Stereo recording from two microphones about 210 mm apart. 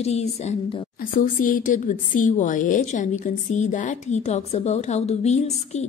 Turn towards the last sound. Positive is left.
turn(degrees=30)  # may be behind; listen again after turning